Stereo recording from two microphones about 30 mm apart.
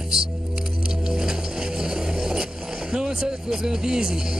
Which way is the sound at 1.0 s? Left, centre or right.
Right.